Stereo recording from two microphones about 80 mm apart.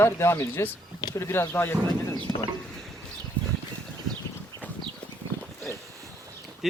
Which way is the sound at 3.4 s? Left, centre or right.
Centre.